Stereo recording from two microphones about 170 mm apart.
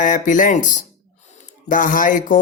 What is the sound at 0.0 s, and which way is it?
Speech, 50° left (ahead or behind).